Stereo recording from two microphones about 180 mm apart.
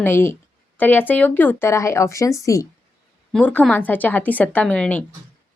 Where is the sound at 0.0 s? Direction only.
15° left (ahead or behind).